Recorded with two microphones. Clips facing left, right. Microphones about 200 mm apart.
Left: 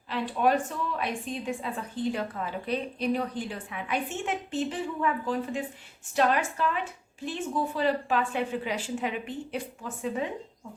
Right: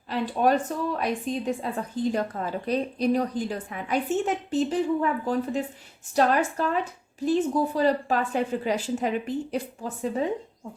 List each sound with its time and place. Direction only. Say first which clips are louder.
0.1 s a woman's voice: right 3 dB; 40° right (ahead or behind)